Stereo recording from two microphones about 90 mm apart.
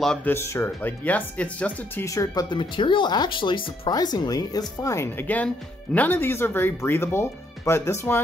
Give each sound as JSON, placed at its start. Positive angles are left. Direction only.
{"t": 0.2, "sound": "speech", "side_deg": 30}
{"t": 1.0, "sound": "speech", "side_deg": 15}
{"t": 2.0, "sound": "speech", "side_deg": 40}
{"t": 2.5, "sound": "speech", "side_deg": 60}
{"t": 3.9, "sound": "speech", "side_deg": 50}